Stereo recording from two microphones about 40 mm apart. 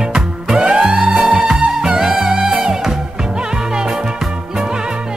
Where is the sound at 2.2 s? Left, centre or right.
Centre.